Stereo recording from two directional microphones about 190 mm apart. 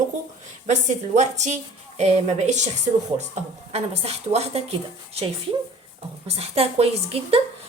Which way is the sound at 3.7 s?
35° right (ahead or behind).